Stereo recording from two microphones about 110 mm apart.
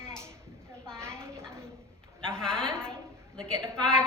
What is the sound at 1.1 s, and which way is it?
A woman's voice, 5° left (ahead or behind).